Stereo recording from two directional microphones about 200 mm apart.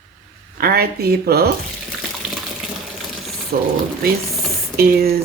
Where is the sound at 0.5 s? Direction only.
50° right (ahead or behind).